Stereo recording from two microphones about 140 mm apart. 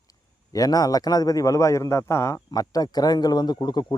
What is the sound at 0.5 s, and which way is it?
Speech, 25° left (ahead or behind).